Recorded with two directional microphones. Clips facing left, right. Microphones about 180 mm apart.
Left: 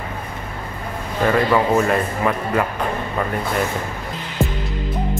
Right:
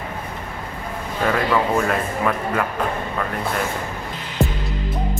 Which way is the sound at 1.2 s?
Centre (ahead or behind).